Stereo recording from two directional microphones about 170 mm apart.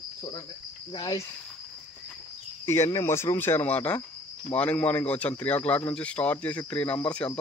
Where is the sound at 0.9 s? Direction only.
25° left (ahead or behind).